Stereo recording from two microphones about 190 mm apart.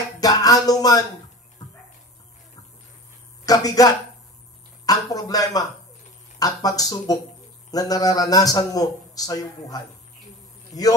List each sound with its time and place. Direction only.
0.2 s speech: 20° left (ahead or behind)
1.6 s a sound: 20° left (ahead or behind)
3.4 s a man's voice: 20° left (ahead or behind)
5.1 s a man's voice: 20° left (ahead or behind)